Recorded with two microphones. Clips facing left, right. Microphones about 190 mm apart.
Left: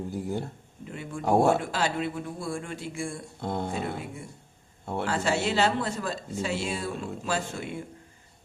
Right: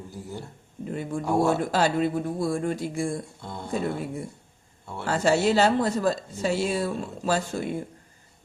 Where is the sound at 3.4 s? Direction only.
55° left (ahead or behind).